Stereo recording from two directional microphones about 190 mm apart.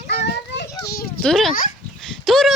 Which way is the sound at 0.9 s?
55° left (ahead or behind).